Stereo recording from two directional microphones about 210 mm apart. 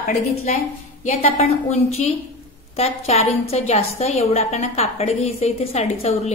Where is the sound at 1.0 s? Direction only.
30° left (ahead or behind).